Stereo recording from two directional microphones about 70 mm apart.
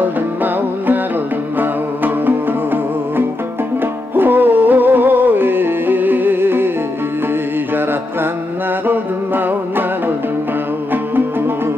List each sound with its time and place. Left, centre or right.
0.0 s music: right
8.8 s music: right